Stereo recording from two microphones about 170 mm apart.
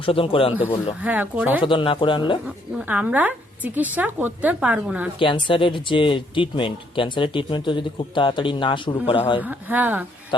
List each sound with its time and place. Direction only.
0.0 s speech: 30° left (ahead or behind)
1.0 s a woman's voice: 10° right (ahead or behind)
1.6 s speech: 30° left (ahead or behind)
2.7 s a woman's voice: 10° right (ahead or behind)
5.2 s speech: 30° left (ahead or behind)
9.4 s a woman's voice: 10° right (ahead or behind)